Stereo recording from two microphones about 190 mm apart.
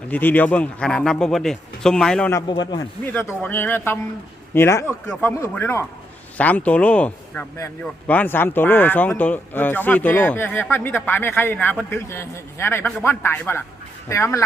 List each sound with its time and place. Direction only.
0.1 s speech: 10° left (ahead or behind)
2.5 s speech: 20° left (ahead or behind)
3.1 s a man's voice: 10° left (ahead or behind)